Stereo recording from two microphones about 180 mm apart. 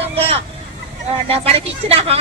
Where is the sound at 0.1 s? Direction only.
35° right (ahead or behind).